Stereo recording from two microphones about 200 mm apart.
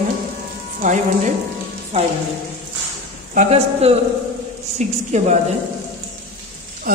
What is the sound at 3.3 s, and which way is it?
A woman's voice, 30° right (ahead or behind).